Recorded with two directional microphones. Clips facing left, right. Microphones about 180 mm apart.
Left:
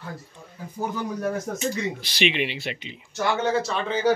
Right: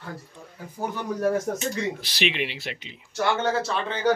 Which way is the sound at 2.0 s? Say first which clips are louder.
Left 3 dB; centre (ahead or behind).